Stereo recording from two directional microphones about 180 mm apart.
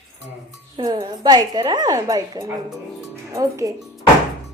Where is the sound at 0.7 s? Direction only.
25° right (ahead or behind).